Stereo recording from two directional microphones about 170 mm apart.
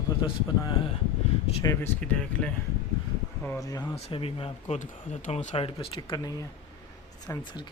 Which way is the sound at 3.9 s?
35° left (ahead or behind).